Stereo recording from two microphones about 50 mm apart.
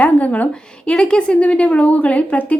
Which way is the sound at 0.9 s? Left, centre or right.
Centre.